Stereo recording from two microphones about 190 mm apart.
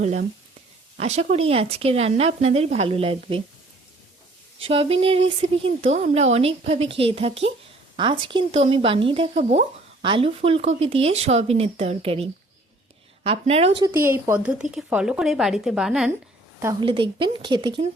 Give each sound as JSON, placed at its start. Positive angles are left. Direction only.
{"t": 0.9, "sound": "speech", "side_deg": -35}
{"t": 4.6, "sound": "speech", "side_deg": -30}
{"t": 13.8, "sound": "speech", "side_deg": -10}
{"t": 16.8, "sound": "speech", "side_deg": -25}